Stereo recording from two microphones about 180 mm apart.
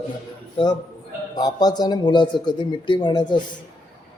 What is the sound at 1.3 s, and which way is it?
A man's voice, 20° left (ahead or behind).